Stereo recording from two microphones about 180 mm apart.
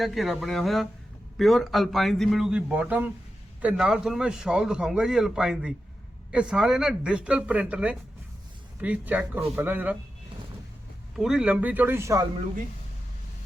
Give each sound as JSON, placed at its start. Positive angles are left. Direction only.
{"t": 0.0, "sound": "a man's voice", "side_deg": 0}
{"t": 11.2, "sound": "speech", "side_deg": -5}